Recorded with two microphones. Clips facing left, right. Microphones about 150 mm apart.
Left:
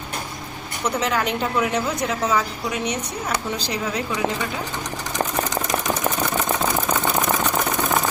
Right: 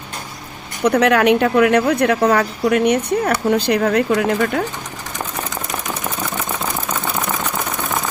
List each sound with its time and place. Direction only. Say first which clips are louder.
0.9 s a woman's voice: right 10 dB; 65° right (ahead or behind)